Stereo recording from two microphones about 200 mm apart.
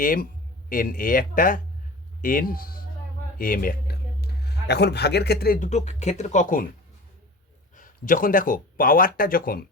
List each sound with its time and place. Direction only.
0.0 s speech: 45° left (ahead or behind)
7.8 s speech: 45° left (ahead or behind)